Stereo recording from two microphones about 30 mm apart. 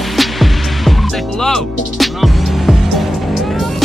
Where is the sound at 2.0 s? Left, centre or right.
Centre.